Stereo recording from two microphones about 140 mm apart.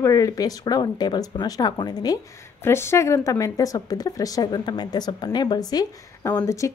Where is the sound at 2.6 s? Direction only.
15° left (ahead or behind).